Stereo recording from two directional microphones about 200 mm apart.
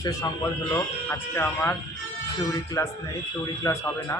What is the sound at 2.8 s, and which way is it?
A man's voice, 15° left (ahead or behind).